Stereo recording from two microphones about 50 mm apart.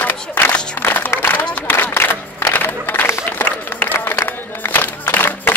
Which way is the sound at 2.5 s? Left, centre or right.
Left.